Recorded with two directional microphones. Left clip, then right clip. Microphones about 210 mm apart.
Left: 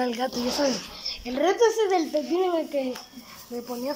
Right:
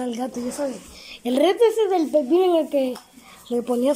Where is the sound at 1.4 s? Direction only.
10° right (ahead or behind).